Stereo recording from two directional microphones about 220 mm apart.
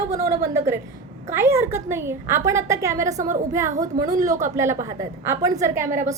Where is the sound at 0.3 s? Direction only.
15° right (ahead or behind).